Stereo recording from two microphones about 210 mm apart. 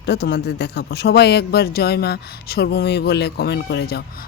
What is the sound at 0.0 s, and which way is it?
Speech, 55° left (ahead or behind).